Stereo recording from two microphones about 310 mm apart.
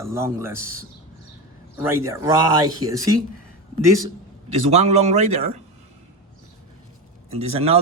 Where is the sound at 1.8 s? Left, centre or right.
Centre.